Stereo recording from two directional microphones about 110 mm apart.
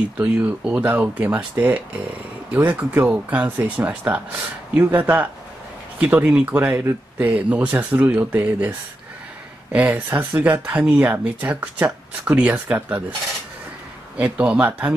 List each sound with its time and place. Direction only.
0.2 s speech: 15° right (ahead or behind)
14.1 s speech: 10° right (ahead or behind)